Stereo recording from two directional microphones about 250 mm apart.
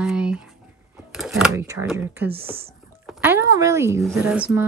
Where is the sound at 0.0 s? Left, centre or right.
Centre.